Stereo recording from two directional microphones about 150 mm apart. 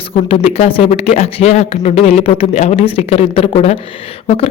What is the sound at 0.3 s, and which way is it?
A woman's voice, 40° left (ahead or behind).